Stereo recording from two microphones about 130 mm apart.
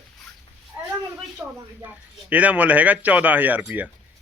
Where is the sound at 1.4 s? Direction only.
5° right (ahead or behind).